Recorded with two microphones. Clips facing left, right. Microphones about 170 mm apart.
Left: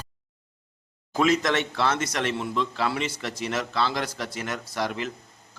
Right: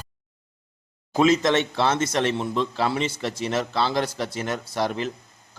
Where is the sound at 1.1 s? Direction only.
25° right (ahead or behind).